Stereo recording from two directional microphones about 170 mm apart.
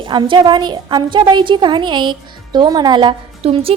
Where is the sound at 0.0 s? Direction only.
30° right (ahead or behind).